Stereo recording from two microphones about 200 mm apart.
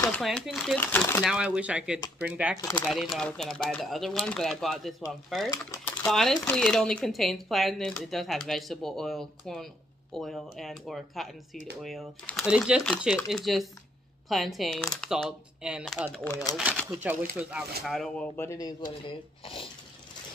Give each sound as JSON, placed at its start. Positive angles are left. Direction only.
{"t": 0.2, "sound": "speech", "side_deg": 0}
{"t": 1.2, "sound": "speech", "side_deg": -5}
{"t": 5.5, "sound": "typewriter", "side_deg": 15}
{"t": 6.0, "sound": "speech", "side_deg": 0}